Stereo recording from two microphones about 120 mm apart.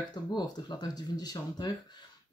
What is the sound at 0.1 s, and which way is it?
Speech, 35° left (ahead or behind).